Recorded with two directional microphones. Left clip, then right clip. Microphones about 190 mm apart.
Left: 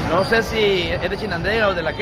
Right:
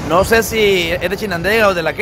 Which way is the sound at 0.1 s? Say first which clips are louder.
Right 6 dB; 45° right (ahead or behind).